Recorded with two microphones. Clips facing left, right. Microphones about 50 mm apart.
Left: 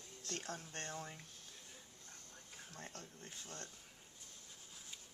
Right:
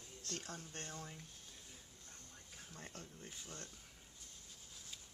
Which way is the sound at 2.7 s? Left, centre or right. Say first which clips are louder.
Even; centre.